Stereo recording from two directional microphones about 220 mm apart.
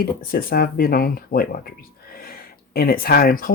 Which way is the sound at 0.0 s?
40° left (ahead or behind).